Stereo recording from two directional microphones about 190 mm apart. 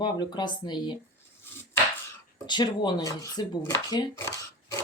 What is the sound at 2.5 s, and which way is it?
Speech, 25° left (ahead or behind).